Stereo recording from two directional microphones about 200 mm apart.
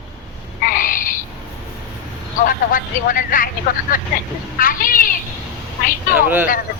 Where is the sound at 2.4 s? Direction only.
45° left (ahead or behind).